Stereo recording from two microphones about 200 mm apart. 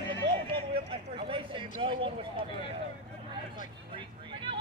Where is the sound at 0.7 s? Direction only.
25° right (ahead or behind).